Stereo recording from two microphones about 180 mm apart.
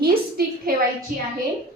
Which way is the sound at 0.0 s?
60° right (ahead or behind).